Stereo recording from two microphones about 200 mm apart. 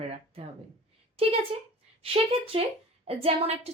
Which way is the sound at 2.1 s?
30° right (ahead or behind).